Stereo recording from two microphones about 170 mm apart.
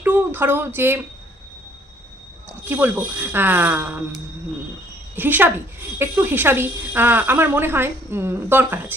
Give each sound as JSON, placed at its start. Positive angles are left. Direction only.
{"t": 0.0, "sound": "a sound", "side_deg": -10}
{"t": 2.6, "sound": "speech", "side_deg": -10}
{"t": 5.1, "sound": "speech", "side_deg": -10}